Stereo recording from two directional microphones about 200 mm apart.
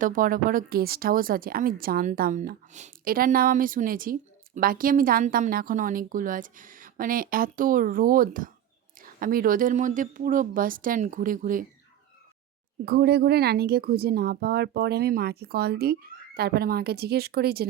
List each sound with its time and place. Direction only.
0.0 s speech: 45° right (ahead or behind)
12.8 s speech: 50° right (ahead or behind)